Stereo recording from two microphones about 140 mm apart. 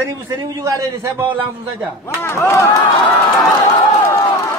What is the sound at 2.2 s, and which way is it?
Speech, 20° left (ahead or behind).